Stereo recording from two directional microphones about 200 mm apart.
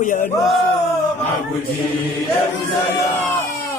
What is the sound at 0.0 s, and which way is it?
Speech, 40° left (ahead or behind).